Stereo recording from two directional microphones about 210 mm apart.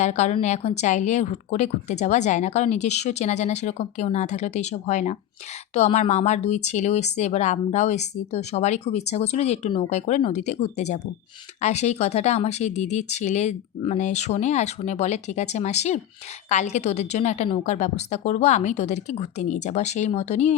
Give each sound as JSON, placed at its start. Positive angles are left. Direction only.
{"t": 0.0, "sound": "speech", "side_deg": 35}